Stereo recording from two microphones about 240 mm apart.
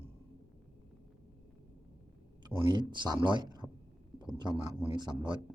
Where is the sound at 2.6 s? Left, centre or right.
Centre.